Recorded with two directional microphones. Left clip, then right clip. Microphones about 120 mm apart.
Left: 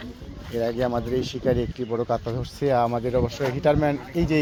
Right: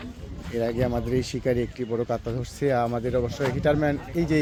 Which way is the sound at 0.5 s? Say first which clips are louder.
Left 2 dB; 25° right (ahead or behind).